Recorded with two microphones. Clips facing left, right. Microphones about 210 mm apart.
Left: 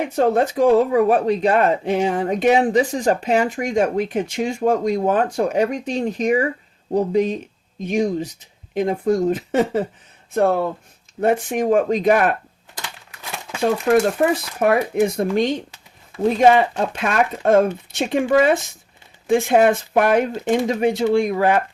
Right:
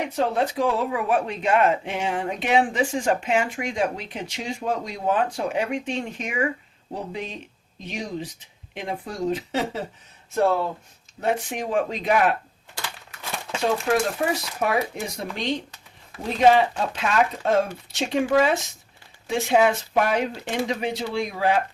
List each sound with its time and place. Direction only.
0.2 s speech: 45° left (ahead or behind)
14.2 s speech: 55° left (ahead or behind)